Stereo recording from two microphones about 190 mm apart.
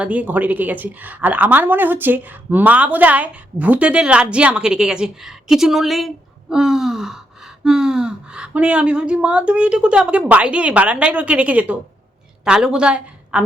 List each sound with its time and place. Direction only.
0.0 s a woman's voice: 5° right (ahead or behind)
6.5 s gasp: centre (ahead or behind)
12.5 s a woman's voice: 5° right (ahead or behind)